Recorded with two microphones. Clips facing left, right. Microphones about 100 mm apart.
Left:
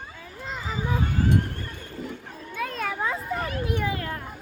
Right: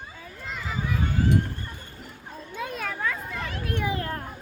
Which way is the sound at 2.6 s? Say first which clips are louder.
Left 2 dB; 25° right (ahead or behind).